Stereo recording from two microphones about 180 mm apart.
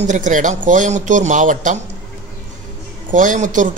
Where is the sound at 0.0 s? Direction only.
45° right (ahead or behind).